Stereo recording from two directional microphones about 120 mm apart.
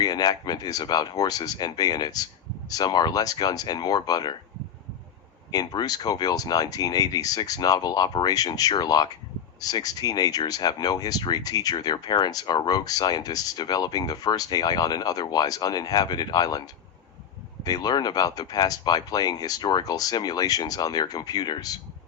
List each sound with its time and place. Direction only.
0.0 s speech: 30° left (ahead or behind)
5.5 s speech: 35° left (ahead or behind)